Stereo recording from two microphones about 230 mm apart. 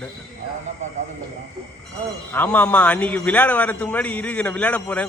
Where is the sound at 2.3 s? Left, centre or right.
Centre.